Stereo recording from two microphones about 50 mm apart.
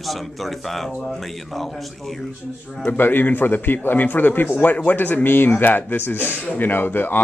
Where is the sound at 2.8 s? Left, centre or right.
Left.